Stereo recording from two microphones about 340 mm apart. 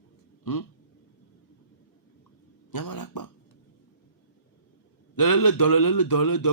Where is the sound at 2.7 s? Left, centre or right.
Left.